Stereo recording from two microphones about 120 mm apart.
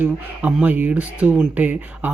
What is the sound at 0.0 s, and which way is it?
Speech, 15° right (ahead or behind).